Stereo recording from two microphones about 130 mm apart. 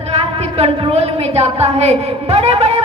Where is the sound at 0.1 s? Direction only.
55° right (ahead or behind).